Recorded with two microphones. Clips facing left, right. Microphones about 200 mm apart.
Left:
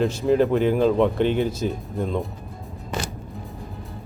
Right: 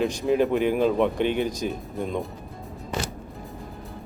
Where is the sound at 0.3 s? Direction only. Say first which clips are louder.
Left 3 dB; 15° right (ahead or behind).